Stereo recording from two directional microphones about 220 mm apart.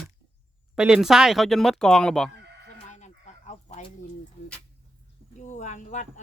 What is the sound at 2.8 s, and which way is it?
Chicken, 30° left (ahead or behind).